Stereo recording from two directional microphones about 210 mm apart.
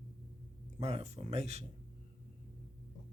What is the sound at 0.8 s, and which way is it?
Speech, 30° right (ahead or behind).